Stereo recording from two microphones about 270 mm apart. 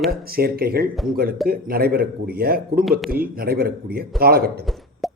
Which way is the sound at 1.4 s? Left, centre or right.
Right.